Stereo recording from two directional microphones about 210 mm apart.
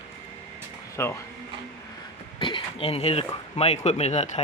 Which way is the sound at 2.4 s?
25° left (ahead or behind).